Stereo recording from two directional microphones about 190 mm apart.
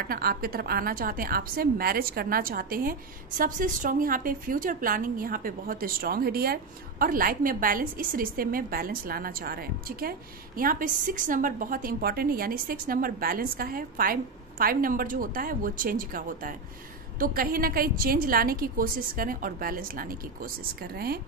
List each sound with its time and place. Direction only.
0.1 s a woman's voice: 50° right (ahead or behind)